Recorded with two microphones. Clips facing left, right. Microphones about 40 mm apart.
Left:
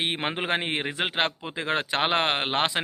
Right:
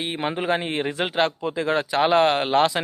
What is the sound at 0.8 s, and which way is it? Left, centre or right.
Speech, left.